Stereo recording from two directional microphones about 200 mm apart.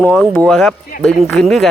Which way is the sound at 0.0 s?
5° left (ahead or behind).